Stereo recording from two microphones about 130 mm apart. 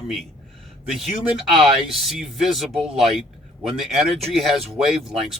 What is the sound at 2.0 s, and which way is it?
Speech, centre (ahead or behind).